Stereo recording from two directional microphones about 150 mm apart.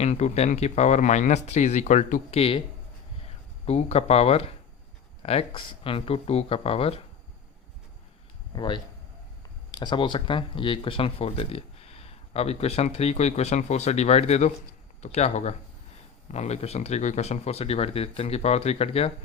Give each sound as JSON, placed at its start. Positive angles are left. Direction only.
{"t": 0.0, "sound": "speech", "side_deg": 45}
{"t": 2.3, "sound": "speech", "side_deg": 40}
{"t": 3.7, "sound": "speech", "side_deg": 45}
{"t": 8.5, "sound": "speech", "side_deg": 30}